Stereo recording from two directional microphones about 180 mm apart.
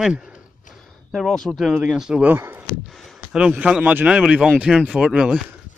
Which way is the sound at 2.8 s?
Centre (ahead or behind).